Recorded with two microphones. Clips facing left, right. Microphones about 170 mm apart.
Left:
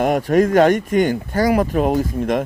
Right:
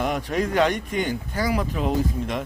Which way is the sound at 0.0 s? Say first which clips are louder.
Left 9 dB; 45° left (ahead or behind).